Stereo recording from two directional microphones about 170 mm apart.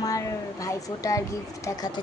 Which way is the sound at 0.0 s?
20° left (ahead or behind).